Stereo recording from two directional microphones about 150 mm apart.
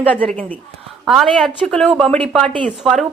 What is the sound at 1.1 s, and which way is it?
Speech, centre (ahead or behind).